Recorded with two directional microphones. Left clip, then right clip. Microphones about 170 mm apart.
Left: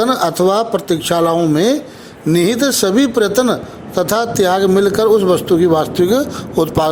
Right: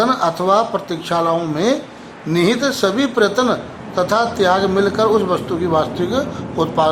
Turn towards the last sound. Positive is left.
turn(degrees=55)  # may be behind; listen again after turning